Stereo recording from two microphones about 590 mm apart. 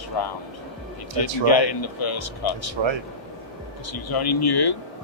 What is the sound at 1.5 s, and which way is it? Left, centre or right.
Speech, left.